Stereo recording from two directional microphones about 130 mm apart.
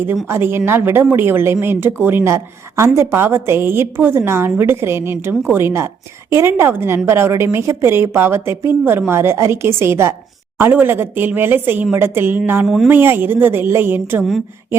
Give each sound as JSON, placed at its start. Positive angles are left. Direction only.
{"t": 0.3, "sound": "a woman's voice", "side_deg": -20}
{"t": 12.6, "sound": "speech", "side_deg": 0}
{"t": 12.9, "sound": "speech", "side_deg": -15}